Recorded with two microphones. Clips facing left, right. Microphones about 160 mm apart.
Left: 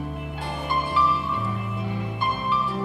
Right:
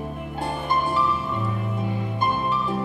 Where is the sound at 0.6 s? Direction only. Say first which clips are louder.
Right 1 dB; 40° right (ahead or behind).